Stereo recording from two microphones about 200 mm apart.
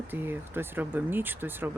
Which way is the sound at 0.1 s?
10° right (ahead or behind).